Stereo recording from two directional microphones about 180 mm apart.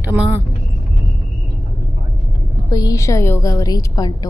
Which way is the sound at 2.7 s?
20° left (ahead or behind).